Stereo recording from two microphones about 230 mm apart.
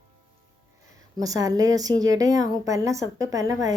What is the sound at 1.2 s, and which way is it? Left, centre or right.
A woman's voice, centre.